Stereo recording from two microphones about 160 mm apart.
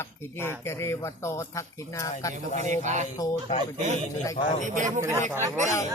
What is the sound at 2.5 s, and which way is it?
Speech, 50° right (ahead or behind).